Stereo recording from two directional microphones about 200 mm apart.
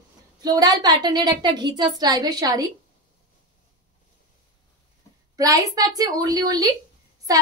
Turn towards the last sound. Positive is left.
turn(degrees=-20)  # may be behind; listen again after turning